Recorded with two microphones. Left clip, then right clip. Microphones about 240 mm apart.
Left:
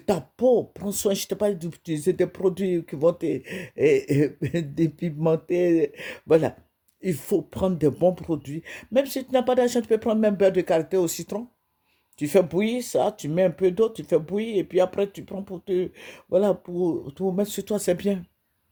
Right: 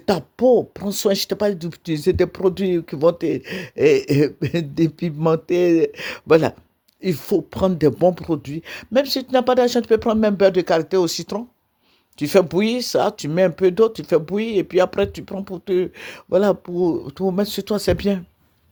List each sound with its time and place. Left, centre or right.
0.0 s speech: centre